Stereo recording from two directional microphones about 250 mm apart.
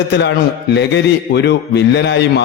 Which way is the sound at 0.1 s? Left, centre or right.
Left.